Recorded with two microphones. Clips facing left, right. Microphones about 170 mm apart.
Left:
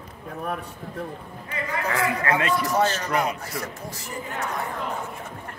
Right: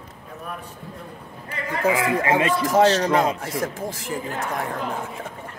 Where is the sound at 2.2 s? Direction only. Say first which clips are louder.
Right 3 dB; 25° right (ahead or behind).